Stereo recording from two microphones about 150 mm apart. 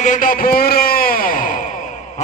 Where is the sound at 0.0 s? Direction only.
60° left (ahead or behind).